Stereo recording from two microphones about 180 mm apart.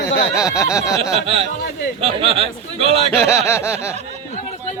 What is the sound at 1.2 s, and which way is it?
A man's voice, 30° right (ahead or behind).